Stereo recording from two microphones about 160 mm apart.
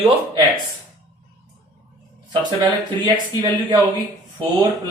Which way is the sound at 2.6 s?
25° right (ahead or behind).